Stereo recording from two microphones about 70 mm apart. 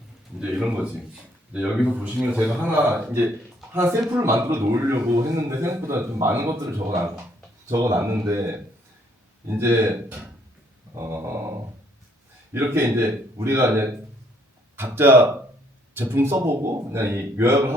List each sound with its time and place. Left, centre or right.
0.3 s a man's voice: centre
3.8 s a man's voice: right
10.9 s a man's voice: right
12.5 s a man's voice: right